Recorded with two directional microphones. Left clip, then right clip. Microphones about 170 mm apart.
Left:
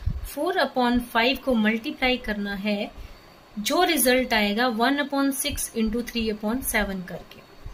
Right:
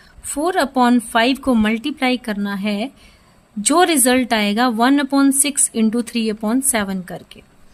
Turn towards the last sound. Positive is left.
turn(degrees=-60)  # may be behind; listen again after turning